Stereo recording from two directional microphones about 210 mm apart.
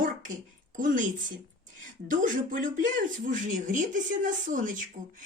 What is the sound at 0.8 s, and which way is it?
Speech, 40° right (ahead or behind).